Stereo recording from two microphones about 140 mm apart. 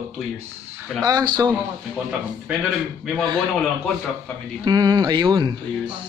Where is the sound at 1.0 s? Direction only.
25° right (ahead or behind).